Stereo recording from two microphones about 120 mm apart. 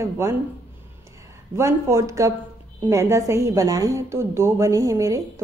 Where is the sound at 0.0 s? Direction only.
20° right (ahead or behind).